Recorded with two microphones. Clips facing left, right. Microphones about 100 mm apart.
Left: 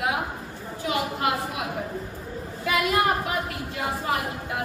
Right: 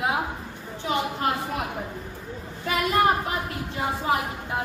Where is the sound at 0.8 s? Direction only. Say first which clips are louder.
Even; 35° right (ahead or behind).